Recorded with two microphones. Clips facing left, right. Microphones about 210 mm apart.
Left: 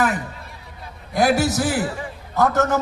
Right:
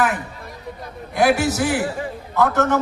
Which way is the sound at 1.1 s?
40° left (ahead or behind).